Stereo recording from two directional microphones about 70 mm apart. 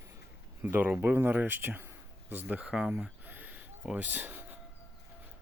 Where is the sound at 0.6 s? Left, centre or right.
Right.